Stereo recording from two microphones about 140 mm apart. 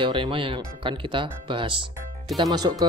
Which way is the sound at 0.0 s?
35° right (ahead or behind).